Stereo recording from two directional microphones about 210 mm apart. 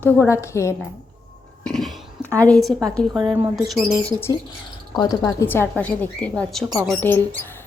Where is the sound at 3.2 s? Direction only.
10° right (ahead or behind).